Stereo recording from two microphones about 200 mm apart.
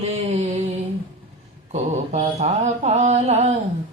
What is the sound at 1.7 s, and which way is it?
Speech, 30° right (ahead or behind).